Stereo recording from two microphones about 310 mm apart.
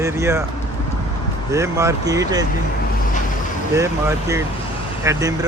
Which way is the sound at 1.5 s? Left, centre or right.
Centre.